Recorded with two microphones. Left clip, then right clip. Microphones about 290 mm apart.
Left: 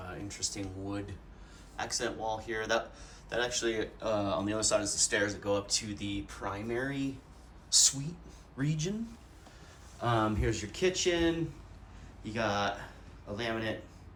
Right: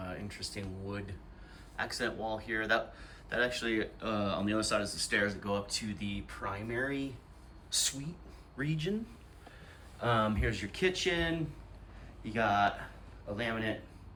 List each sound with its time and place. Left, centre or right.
0.0 s speech: centre
10.0 s speech: centre